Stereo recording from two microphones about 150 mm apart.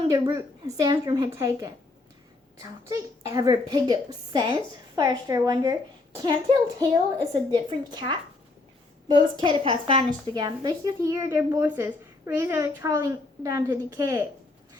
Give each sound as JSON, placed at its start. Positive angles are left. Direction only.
{"t": 0.1, "sound": "a woman's voice", "side_deg": -25}
{"t": 2.9, "sound": "a woman's voice", "side_deg": -25}